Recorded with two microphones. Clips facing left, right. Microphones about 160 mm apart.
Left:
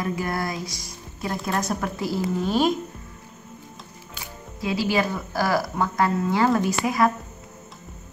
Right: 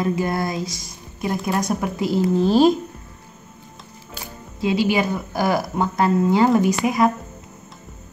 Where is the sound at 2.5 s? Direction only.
30° right (ahead or behind).